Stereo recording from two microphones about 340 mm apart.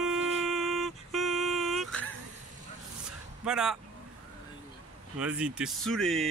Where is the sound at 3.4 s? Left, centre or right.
Centre.